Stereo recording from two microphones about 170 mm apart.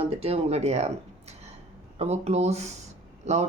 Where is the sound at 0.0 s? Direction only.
35° right (ahead or behind).